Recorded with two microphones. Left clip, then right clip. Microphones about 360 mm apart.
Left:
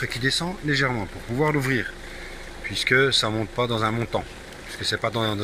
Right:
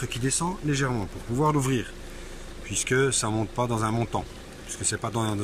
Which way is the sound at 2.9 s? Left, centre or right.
Centre.